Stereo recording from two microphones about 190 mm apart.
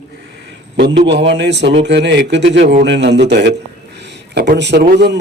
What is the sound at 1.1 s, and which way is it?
A man's voice, 65° right (ahead or behind).